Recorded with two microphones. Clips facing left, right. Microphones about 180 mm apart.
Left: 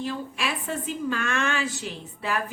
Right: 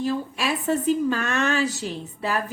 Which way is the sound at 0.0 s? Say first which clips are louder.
Right 5 dB; 40° right (ahead or behind).